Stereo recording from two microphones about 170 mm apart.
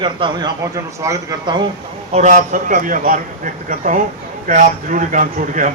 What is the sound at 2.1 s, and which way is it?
A man's voice, 45° right (ahead or behind).